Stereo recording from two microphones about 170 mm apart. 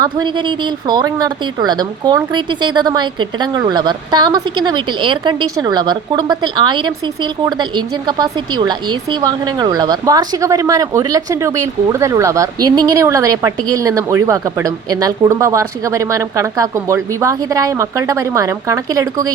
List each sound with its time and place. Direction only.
0.0 s speech: 25° right (ahead or behind)